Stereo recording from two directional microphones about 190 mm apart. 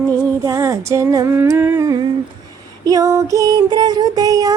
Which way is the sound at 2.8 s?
15° right (ahead or behind).